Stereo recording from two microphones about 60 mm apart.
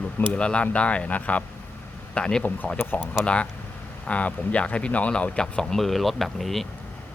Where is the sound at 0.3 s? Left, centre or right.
Centre.